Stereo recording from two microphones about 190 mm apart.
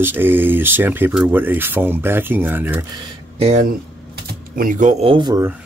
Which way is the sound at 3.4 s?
40° right (ahead or behind).